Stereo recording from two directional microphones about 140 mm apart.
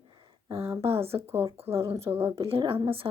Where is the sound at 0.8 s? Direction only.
45° right (ahead or behind).